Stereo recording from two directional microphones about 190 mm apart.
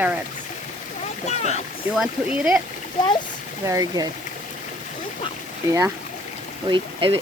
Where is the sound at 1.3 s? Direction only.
35° left (ahead or behind).